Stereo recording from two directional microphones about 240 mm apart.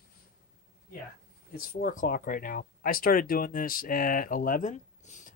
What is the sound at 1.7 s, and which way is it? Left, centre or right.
Speech, left.